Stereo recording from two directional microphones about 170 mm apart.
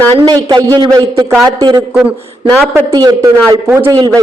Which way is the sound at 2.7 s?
20° right (ahead or behind).